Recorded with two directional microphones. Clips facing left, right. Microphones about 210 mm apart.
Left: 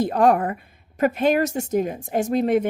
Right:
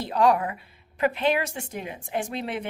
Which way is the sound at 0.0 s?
50° left (ahead or behind).